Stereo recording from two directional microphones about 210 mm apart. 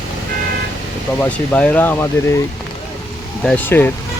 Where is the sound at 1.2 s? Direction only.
10° left (ahead or behind).